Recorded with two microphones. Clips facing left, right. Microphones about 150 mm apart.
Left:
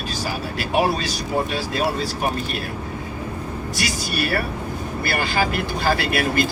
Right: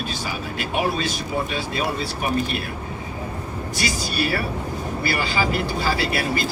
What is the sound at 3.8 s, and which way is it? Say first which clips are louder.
A man's voice: right 1 dB; 55° left (ahead or behind).